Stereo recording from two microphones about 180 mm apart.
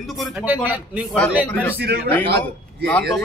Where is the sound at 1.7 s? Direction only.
65° right (ahead or behind).